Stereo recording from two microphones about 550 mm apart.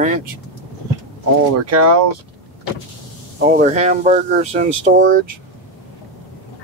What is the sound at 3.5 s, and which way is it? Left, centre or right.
Speech, centre.